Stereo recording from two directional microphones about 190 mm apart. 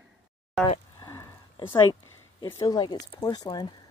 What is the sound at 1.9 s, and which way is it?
Speech, 20° left (ahead or behind).